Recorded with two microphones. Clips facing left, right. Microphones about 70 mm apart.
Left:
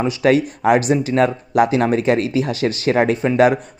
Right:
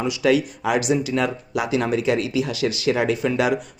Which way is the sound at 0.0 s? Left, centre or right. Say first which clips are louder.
Left 4 dB; left.